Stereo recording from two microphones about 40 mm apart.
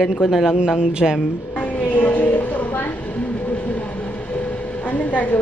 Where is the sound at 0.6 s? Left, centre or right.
Right.